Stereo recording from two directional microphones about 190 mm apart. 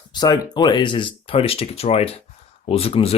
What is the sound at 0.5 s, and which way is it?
Speech, 25° left (ahead or behind).